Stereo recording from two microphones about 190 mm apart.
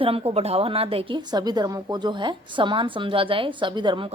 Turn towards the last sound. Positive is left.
turn(degrees=-25)  # may be behind; listen again after turning